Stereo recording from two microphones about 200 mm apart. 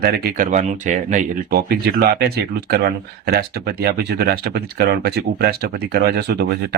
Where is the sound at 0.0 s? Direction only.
50° right (ahead or behind).